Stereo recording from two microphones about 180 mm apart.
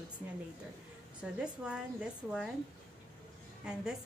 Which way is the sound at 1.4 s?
5° right (ahead or behind).